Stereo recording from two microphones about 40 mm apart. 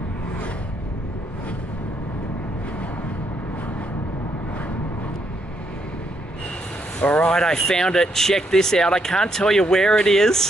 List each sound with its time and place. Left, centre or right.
7.0 s speech: left
7.2 s speech: centre